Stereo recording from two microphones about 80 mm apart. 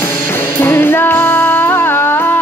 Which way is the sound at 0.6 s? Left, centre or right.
Left.